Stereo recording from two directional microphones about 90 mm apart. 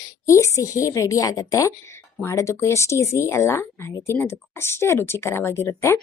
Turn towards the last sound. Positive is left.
turn(degrees=35)  # may be behind; listen again after turning